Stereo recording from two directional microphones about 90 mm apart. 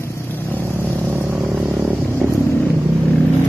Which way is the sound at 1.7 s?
25° right (ahead or behind).